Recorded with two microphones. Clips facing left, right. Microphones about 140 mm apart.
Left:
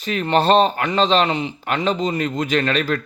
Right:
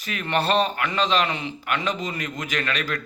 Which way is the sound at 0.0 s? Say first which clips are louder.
Left 7 dB; 30° left (ahead or behind).